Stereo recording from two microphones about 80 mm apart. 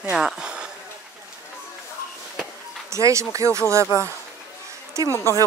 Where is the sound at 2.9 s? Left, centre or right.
Right.